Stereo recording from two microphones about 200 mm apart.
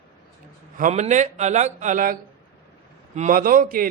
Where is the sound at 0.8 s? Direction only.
35° right (ahead or behind).